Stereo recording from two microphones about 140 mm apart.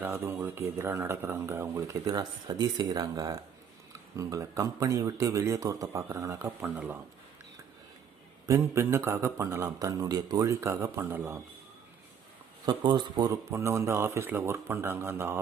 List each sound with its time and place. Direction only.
0.0 s speech: 15° right (ahead or behind)
8.4 s speech: 20° right (ahead or behind)
12.6 s speech: 30° right (ahead or behind); by 15.4 s 15° right (ahead or behind)